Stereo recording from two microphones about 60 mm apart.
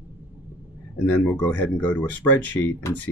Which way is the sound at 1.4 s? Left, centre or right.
Left.